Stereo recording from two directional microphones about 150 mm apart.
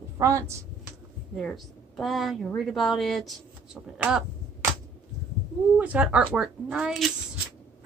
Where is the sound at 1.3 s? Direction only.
Centre (ahead or behind).